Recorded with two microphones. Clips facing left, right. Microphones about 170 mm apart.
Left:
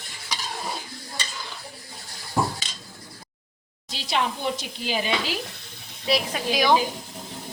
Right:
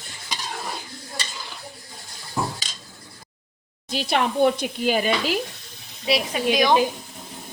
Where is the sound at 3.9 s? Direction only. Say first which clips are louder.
Right 4 dB; 55° right (ahead or behind).